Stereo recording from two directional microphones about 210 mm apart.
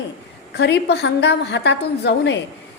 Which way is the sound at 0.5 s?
55° left (ahead or behind).